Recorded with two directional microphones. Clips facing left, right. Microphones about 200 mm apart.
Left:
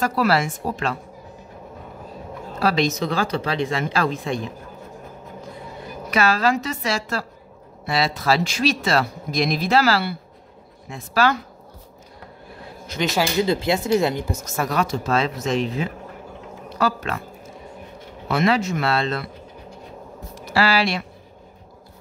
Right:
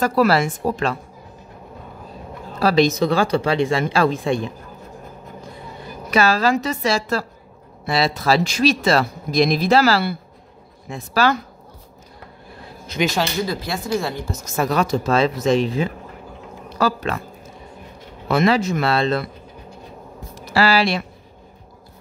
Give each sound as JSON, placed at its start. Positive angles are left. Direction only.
{"t": 0.0, "sound": "speech", "side_deg": -40}
{"t": 2.6, "sound": "speech", "side_deg": -35}
{"t": 6.0, "sound": "speech", "side_deg": -35}
{"t": 13.0, "sound": "speech", "side_deg": 5}
{"t": 13.4, "sound": "speech", "side_deg": 20}
{"t": 14.6, "sound": "speech", "side_deg": -30}
{"t": 18.3, "sound": "speech", "side_deg": -35}
{"t": 20.3, "sound": "speech", "side_deg": -35}